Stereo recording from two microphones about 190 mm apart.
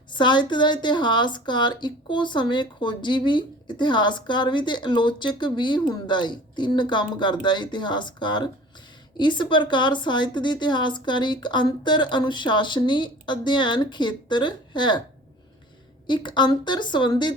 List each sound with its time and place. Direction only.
0.1 s a woman's voice: 25° left (ahead or behind)
16.0 s a woman's voice: 25° left (ahead or behind)